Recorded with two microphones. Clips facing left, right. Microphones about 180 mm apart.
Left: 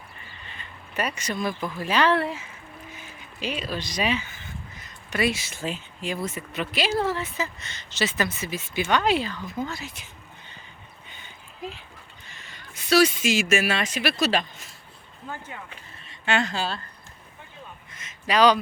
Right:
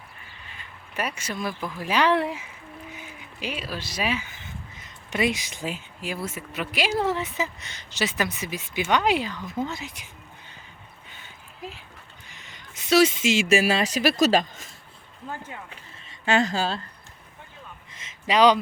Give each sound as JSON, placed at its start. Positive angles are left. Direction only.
{"t": 0.5, "sound": "speech", "side_deg": -10}
{"t": 5.1, "sound": "speech", "side_deg": -20}
{"t": 11.1, "sound": "a sound", "side_deg": -5}
{"t": 12.3, "sound": "speech", "side_deg": -15}
{"t": 16.2, "sound": "a woman's voice", "side_deg": -40}
{"t": 18.3, "sound": "speech", "side_deg": -20}